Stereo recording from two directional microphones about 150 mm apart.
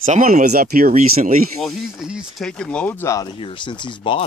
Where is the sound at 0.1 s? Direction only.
65° right (ahead or behind).